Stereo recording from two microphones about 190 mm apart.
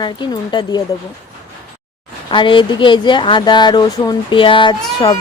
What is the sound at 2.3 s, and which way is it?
A woman's voice, 25° left (ahead or behind).